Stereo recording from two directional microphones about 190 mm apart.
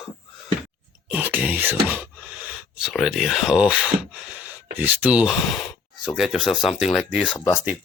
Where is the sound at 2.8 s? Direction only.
5° right (ahead or behind).